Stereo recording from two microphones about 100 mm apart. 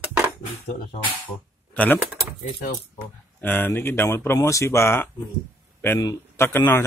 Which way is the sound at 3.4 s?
20° left (ahead or behind).